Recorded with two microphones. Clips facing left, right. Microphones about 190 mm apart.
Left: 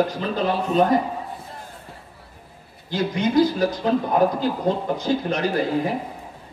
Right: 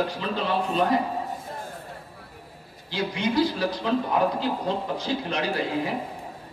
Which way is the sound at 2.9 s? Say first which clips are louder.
Left 4 dB; 45° left (ahead or behind).